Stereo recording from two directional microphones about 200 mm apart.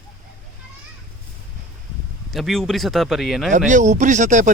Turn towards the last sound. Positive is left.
turn(degrees=-40)  # may be behind; listen again after turning